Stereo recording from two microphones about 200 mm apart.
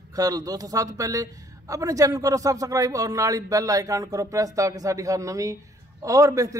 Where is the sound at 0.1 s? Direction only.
20° right (ahead or behind).